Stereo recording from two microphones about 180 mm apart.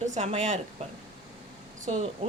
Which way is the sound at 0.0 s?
40° right (ahead or behind).